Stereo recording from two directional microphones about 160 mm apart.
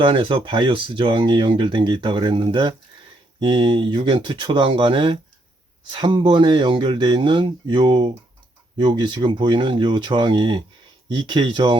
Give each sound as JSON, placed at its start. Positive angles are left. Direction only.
{"t": 0.0, "sound": "speech", "side_deg": -30}